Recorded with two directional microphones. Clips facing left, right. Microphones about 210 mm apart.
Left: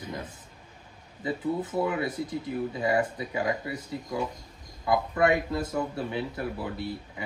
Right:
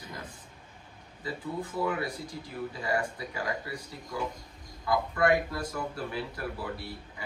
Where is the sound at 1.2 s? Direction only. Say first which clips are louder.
Left 6 dB; 20° left (ahead or behind).